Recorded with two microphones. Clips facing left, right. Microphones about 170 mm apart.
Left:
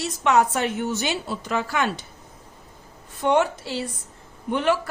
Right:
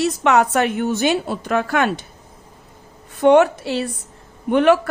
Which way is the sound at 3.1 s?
65° right (ahead or behind).